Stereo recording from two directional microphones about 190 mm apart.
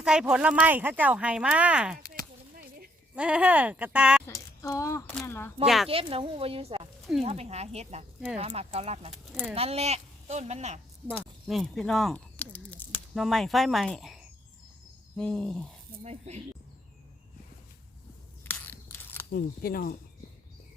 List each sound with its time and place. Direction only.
0.0 s speech: 5° right (ahead or behind)
3.2 s speech: 5° right (ahead or behind)
4.3 s speech: 20° left (ahead or behind)
5.6 s speech: centre (ahead or behind)
5.9 s speech: 30° right (ahead or behind)
9.1 s speech: centre (ahead or behind)
9.6 s speech: 35° right (ahead or behind)
11.2 s speech: centre (ahead or behind)
16.0 s speech: 35° right (ahead or behind)
18.4 s biting: 10° left (ahead or behind)
19.3 s speech: 50° left (ahead or behind)